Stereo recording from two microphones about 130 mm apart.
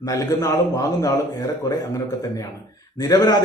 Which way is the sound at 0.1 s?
25° left (ahead or behind).